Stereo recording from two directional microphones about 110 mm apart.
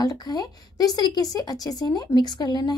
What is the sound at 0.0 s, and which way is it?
Speech, 35° left (ahead or behind).